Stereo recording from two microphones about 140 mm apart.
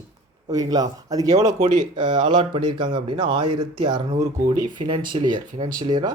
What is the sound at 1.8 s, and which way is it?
Speech, 35° right (ahead or behind).